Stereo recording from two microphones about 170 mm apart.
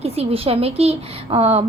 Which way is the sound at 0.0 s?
35° right (ahead or behind).